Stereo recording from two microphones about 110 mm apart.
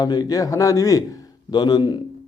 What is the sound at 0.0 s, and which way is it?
A man's voice, 40° left (ahead or behind).